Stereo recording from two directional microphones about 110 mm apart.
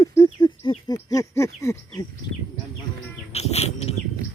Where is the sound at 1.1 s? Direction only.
30° left (ahead or behind).